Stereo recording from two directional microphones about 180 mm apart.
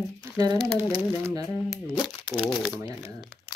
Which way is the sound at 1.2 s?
15° right (ahead or behind).